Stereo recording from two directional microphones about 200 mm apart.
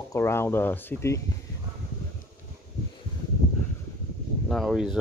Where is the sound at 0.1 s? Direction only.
15° left (ahead or behind).